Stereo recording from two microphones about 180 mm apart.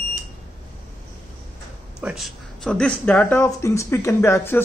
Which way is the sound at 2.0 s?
Centre (ahead or behind).